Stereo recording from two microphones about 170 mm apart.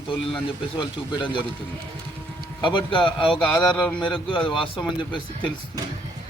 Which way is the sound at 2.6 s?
30° left (ahead or behind).